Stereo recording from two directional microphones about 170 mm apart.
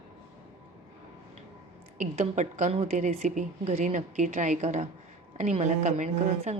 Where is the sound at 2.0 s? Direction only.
45° right (ahead or behind).